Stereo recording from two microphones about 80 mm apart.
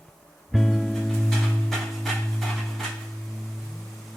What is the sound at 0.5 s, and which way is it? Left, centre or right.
Music, centre.